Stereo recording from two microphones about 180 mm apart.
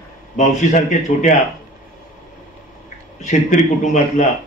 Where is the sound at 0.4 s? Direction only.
40° left (ahead or behind).